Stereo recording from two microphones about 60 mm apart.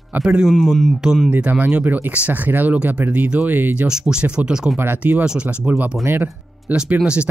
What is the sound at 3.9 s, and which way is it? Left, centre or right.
Speech, centre.